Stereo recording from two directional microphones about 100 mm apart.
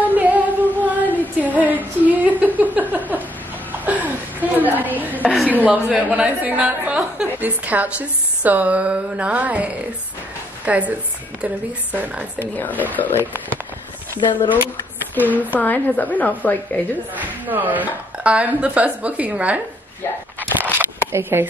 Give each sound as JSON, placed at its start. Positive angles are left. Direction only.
{"t": 0.0, "sound": "a sound", "side_deg": -15}
{"t": 5.5, "sound": "a woman's voice", "side_deg": -15}
{"t": 12.5, "sound": "a woman's voice", "side_deg": 15}
{"t": 14.2, "sound": "speech", "side_deg": 50}
{"t": 15.6, "sound": "a woman's voice", "side_deg": 15}
{"t": 17.2, "sound": "a woman's voice", "side_deg": -15}
{"t": 20.3, "sound": "a sound", "side_deg": -20}
{"t": 21.1, "sound": "speech", "side_deg": -25}